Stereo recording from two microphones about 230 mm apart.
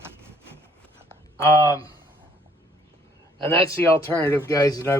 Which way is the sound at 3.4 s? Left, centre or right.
Centre.